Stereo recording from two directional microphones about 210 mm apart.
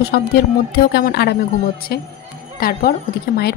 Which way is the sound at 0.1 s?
50° left (ahead or behind).